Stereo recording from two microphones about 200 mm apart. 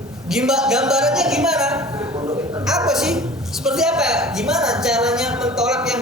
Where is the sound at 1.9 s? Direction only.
15° right (ahead or behind).